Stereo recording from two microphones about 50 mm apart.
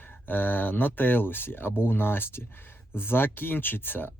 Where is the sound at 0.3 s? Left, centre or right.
Left.